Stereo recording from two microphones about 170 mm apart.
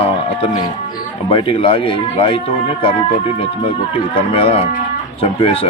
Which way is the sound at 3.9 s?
35° left (ahead or behind).